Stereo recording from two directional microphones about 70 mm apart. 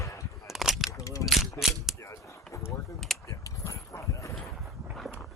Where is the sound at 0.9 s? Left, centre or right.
Left.